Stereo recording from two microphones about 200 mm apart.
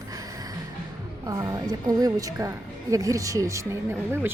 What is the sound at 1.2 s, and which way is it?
A woman's voice, 15° right (ahead or behind).